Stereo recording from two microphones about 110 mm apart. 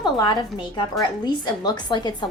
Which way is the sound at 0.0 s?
40° left (ahead or behind).